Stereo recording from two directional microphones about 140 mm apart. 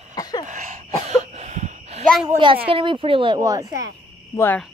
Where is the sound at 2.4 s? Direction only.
40° right (ahead or behind).